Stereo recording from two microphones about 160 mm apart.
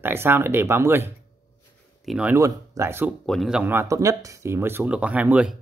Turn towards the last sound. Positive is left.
turn(degrees=-5)  # may be behind; listen again after turning